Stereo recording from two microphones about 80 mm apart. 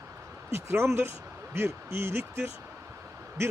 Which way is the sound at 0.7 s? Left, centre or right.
Right.